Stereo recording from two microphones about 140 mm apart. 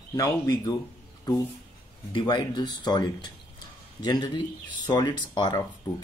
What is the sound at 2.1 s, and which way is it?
Speech, 35° left (ahead or behind).